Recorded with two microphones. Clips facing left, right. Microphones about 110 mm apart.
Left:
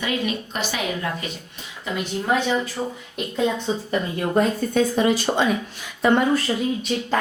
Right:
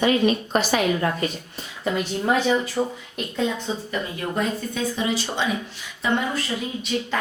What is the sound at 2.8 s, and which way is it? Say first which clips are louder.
Speech: right 3 dB; 10° right (ahead or behind).